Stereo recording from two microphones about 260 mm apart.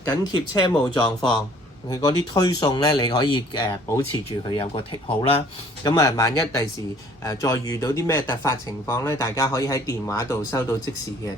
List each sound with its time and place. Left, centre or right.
0.1 s speech: centre